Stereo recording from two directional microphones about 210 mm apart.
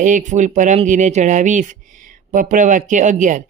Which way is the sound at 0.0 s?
35° right (ahead or behind).